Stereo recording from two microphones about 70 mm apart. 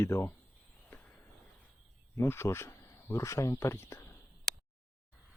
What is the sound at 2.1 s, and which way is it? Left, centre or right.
Speech, left.